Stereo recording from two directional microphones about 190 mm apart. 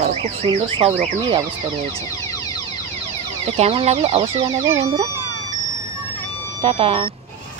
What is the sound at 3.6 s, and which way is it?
Speech, 30° right (ahead or behind).